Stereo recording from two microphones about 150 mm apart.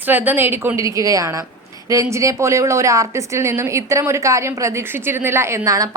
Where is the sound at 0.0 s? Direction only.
10° right (ahead or behind).